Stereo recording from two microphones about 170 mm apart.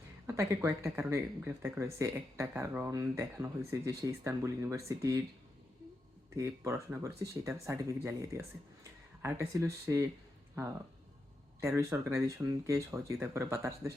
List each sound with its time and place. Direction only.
0.3 s speech: 15° right (ahead or behind)
6.3 s speech: 15° right (ahead or behind)
11.6 s speech: 15° right (ahead or behind)